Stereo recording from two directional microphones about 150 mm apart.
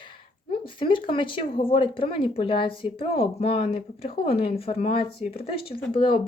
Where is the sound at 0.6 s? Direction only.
35° left (ahead or behind).